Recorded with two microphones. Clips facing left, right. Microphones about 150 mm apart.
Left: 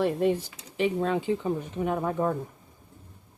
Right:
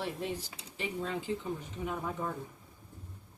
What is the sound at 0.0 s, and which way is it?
Speech, 55° left (ahead or behind).